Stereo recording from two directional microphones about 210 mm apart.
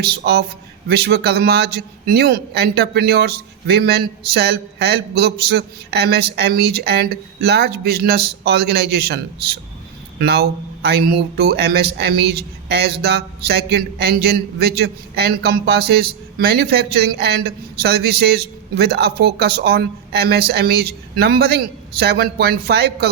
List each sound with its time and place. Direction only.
0.0 s a man's voice: 50° right (ahead or behind)